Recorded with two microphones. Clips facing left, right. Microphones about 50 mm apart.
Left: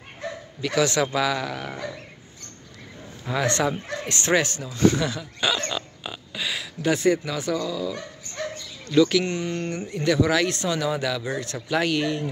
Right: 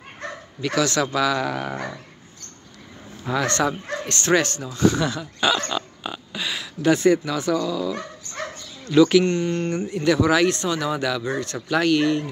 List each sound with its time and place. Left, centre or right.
0.7 s speech: centre
1.4 s dog: centre
1.7 s dog: right
3.3 s speech: centre
8.4 s bow-wow: centre
9.2 s speech: centre
9.8 s speech: centre